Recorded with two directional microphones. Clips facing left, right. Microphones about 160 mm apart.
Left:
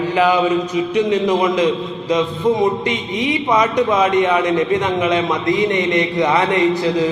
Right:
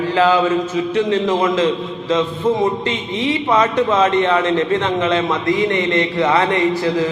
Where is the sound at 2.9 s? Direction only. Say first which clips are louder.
Even; 15° left (ahead or behind).